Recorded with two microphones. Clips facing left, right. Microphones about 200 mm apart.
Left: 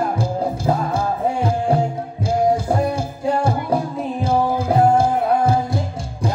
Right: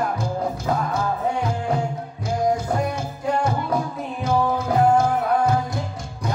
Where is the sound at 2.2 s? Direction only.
30° left (ahead or behind).